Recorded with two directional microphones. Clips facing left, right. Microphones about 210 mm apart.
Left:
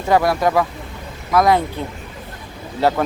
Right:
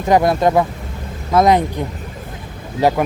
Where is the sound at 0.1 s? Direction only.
20° right (ahead or behind).